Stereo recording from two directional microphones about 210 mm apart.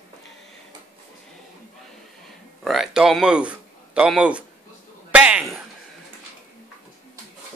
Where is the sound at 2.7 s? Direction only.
Centre (ahead or behind).